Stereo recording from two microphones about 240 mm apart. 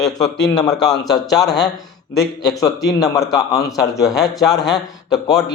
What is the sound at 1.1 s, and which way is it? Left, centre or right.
Speech, centre.